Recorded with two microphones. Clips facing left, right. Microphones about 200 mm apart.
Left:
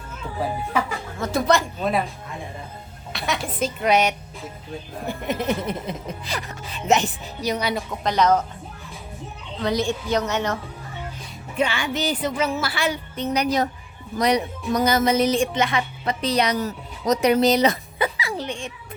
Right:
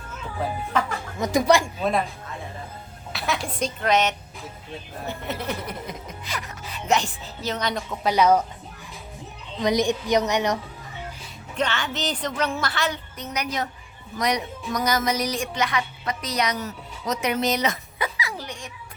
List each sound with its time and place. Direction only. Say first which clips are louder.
0.7 s speech: right 1 dB; 10° left (ahead or behind)
1.2 s a woman's voice: right 1 dB; 15° right (ahead or behind)
3.1 s a woman's voice: left 1 dB; centre (ahead or behind); by 6.4 s 30° left (ahead or behind)
6.8 s speech: left 3 dB; 20° left (ahead or behind)
8.0 s a woman's voice: right 1 dB; 10° right (ahead or behind)
9.6 s a woman's voice: right 1 dB; 15° right (ahead or behind)
11.5 s speech: left 3 dB; 10° left (ahead or behind)
13.1 s a woman's voice: left 7 dB; 30° left (ahead or behind)